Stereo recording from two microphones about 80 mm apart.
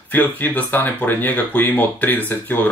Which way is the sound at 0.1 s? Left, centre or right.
Left.